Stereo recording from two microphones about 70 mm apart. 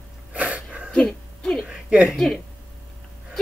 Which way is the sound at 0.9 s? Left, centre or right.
Centre.